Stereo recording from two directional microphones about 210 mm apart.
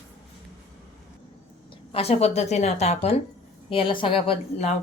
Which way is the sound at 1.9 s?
30° left (ahead or behind).